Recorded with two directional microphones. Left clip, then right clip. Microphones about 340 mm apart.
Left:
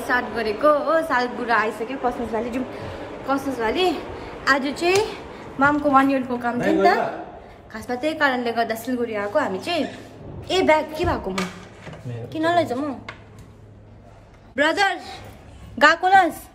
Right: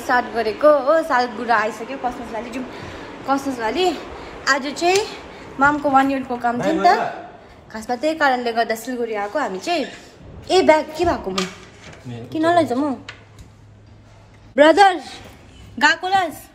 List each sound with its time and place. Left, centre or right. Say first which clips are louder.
0.0 s a woman's voice: right 4 dB; centre
12.3 s a woman's voice: right 4 dB; centre
14.5 s a woman's voice: right 8 dB; centre
15.8 s a woman's voice: left 2 dB; centre